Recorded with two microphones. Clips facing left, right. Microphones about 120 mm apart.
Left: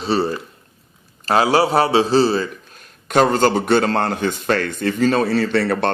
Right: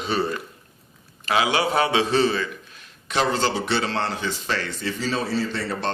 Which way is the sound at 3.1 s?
50° left (ahead or behind).